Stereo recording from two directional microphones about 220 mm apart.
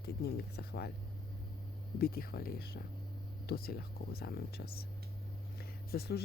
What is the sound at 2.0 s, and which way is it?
Speech, 45° left (ahead or behind).